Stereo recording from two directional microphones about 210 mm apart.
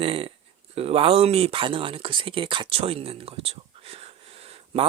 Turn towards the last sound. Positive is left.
turn(degrees=-30)  # may be behind; listen again after turning